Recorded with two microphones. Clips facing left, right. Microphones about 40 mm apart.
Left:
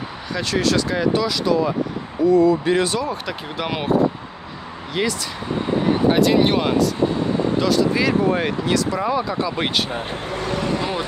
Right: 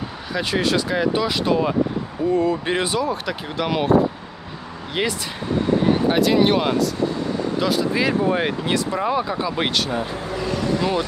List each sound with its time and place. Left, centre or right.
0.3 s speech: centre
1.2 s speech: right
2.9 s speech: centre
5.0 s speech: right
6.0 s speech: centre
7.6 s speech: centre
8.6 s speech: right
10.3 s vehicle: left